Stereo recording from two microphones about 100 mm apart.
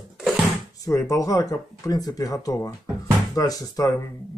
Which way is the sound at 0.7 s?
35° left (ahead or behind).